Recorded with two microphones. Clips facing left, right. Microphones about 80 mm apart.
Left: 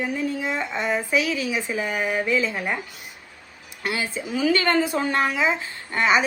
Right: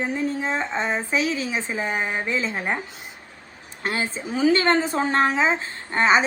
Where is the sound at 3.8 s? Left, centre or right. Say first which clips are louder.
Right 1 dB; right.